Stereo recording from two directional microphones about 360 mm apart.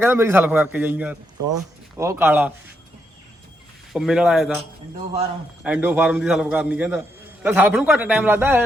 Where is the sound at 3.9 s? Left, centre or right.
Centre.